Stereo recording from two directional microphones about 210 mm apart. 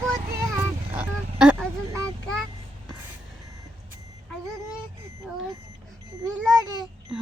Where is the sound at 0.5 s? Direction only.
5° right (ahead or behind).